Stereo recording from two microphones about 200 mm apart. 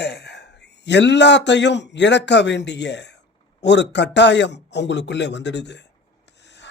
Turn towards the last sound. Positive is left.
turn(degrees=60)  # may be behind; listen again after turning